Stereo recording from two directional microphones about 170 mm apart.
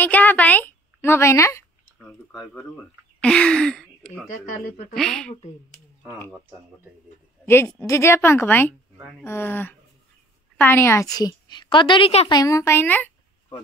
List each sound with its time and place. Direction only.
0.0 s a woman's voice: 10° left (ahead or behind)
3.2 s gasp: 5° left (ahead or behind)
4.9 s speech: 5° left (ahead or behind)
7.4 s a woman's voice: 15° left (ahead or behind); by 12.3 s 35° left (ahead or behind)
12.3 s a woman's voice: 20° left (ahead or behind)